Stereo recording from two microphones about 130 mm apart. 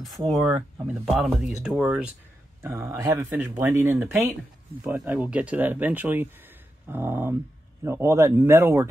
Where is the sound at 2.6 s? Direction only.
20° right (ahead or behind).